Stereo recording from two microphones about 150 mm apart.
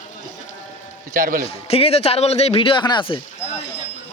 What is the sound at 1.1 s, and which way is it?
Speech, 65° right (ahead or behind).